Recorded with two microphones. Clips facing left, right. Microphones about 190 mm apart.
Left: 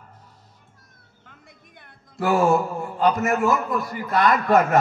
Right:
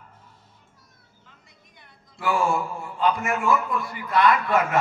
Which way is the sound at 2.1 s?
45° left (ahead or behind).